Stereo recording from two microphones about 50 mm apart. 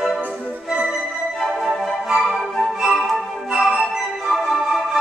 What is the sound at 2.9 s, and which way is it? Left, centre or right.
Music, centre.